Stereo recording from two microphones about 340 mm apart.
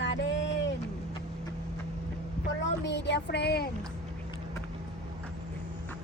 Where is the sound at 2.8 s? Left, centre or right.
Left.